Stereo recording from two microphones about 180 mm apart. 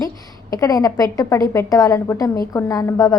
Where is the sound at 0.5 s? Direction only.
20° left (ahead or behind).